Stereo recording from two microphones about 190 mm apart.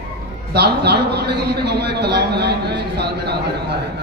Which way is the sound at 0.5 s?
60° right (ahead or behind).